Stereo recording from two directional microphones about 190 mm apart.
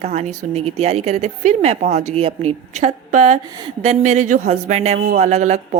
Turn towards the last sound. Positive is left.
turn(degrees=-35)  # may be behind; listen again after turning